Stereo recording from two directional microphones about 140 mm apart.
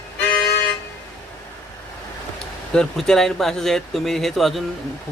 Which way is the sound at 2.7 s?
5° left (ahead or behind).